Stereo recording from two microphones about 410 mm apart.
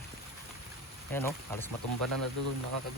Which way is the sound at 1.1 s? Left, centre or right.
Centre.